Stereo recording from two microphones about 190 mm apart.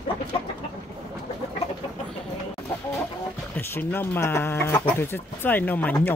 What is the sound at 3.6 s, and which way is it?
Speech, 10° left (ahead or behind).